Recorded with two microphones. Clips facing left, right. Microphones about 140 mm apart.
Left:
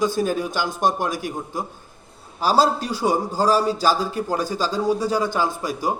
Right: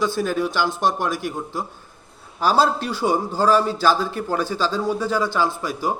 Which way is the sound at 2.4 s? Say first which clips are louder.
Even; 35° left (ahead or behind).